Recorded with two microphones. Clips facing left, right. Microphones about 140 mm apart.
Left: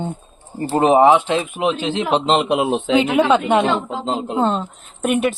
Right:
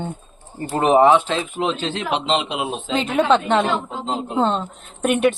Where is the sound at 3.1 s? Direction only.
5° left (ahead or behind).